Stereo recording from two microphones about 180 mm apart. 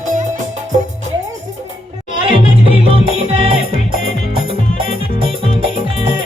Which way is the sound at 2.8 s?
30° right (ahead or behind).